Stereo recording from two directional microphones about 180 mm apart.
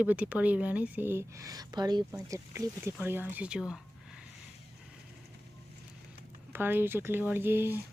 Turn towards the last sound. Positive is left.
turn(degrees=-10)  # may be behind; listen again after turning